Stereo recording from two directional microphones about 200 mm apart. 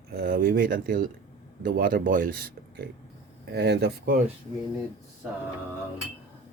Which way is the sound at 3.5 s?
55° right (ahead or behind).